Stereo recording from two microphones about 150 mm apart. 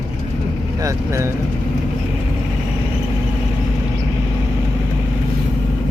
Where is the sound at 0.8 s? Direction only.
20° right (ahead or behind).